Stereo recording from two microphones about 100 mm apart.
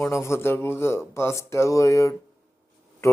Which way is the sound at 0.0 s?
25° left (ahead or behind).